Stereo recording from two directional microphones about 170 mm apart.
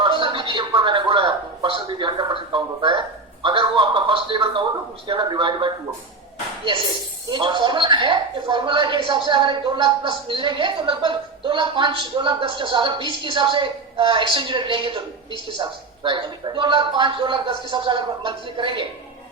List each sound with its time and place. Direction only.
0.0 s a sound: 30° right (ahead or behind)
3.4 s a woman's voice: 30° right (ahead or behind)
7.3 s a woman's voice: 25° right (ahead or behind)